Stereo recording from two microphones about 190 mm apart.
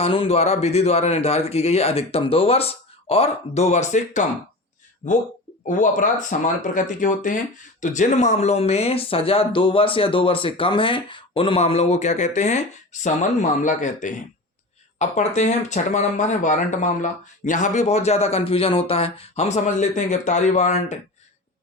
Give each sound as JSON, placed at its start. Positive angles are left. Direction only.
{"t": 0.0, "sound": "speech", "side_deg": 30}